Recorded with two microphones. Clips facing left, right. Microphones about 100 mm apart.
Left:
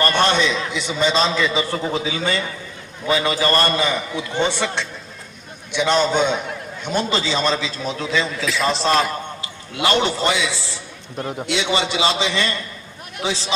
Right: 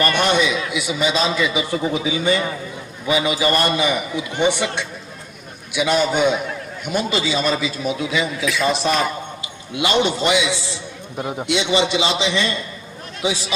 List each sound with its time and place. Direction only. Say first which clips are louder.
0.2 s a man's voice: even; 10° right (ahead or behind)